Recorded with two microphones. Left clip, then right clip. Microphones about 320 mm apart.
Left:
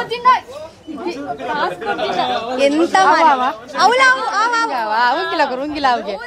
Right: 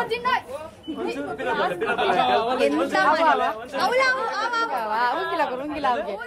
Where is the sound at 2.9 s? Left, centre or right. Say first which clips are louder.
Left 7 dB; left.